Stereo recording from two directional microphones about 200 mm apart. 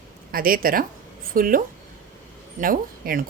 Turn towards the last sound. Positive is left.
turn(degrees=-45)  # may be behind; listen again after turning